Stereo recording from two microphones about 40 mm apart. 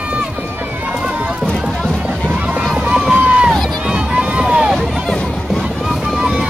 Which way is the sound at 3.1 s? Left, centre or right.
Right.